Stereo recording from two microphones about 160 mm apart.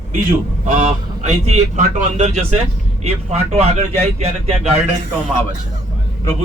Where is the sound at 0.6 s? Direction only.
50° right (ahead or behind).